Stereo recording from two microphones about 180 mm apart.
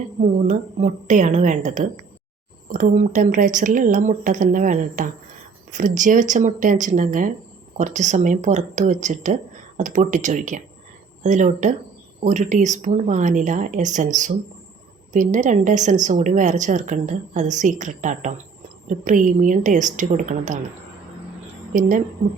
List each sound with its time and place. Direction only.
0.4 s a woman's voice: 40° right (ahead or behind)
21.7 s a woman's voice: 45° right (ahead or behind)